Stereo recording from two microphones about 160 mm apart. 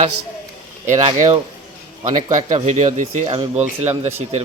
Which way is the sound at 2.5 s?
45° right (ahead or behind).